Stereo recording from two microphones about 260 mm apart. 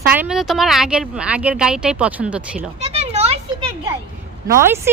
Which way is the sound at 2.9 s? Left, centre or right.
Right.